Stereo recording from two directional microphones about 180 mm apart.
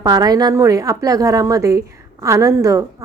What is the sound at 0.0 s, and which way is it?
A woman's voice, 20° right (ahead or behind).